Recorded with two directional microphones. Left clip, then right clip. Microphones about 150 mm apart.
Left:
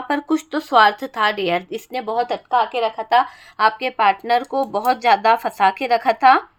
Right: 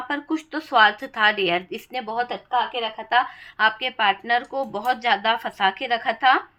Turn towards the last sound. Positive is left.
turn(degrees=25)  # may be behind; listen again after turning